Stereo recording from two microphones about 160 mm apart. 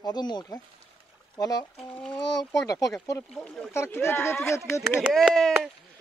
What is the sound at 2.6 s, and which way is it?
Speech, 20° left (ahead or behind).